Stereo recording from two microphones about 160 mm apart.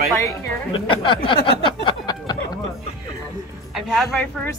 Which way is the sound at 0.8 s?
30° left (ahead or behind).